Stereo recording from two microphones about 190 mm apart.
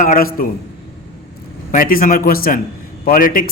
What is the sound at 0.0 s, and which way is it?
Speech, 45° left (ahead or behind).